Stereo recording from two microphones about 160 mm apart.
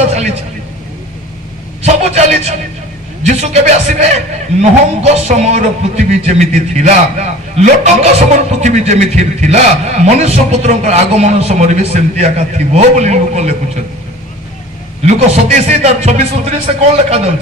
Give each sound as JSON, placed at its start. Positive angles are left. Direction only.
{"t": 1.8, "sound": "a sound", "side_deg": -45}
{"t": 3.3, "sound": "a man's voice", "side_deg": -45}
{"t": 15.0, "sound": "a man's voice", "side_deg": -45}